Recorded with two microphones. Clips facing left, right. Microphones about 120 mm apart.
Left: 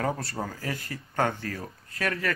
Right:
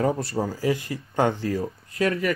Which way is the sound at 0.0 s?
20° right (ahead or behind).